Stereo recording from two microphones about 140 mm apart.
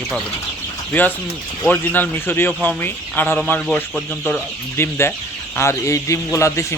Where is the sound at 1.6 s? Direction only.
10° left (ahead or behind).